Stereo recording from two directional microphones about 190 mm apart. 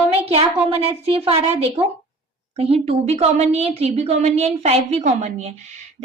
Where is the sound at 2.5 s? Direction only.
35° right (ahead or behind).